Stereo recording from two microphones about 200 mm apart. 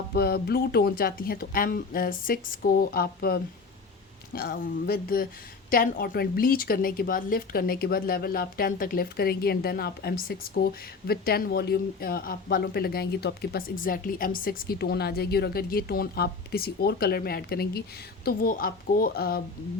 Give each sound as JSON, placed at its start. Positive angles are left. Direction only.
{"t": 0.1, "sound": "a woman's voice", "side_deg": 50}